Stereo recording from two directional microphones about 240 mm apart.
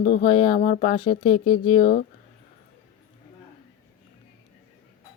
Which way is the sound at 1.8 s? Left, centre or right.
Left.